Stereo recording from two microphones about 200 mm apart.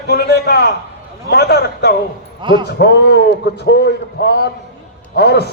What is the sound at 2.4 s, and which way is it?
Speech, 25° right (ahead or behind).